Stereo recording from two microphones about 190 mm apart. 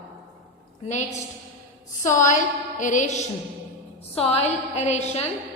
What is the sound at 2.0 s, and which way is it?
Music, 40° left (ahead or behind).